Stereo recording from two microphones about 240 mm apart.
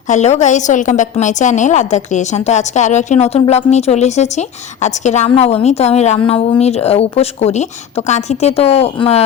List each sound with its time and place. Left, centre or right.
0.1 s a woman's voice: left